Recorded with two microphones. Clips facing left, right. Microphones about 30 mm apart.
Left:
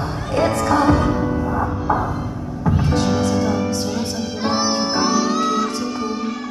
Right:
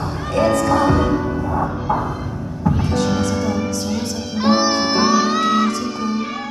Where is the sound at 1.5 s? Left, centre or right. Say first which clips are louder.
Even; centre.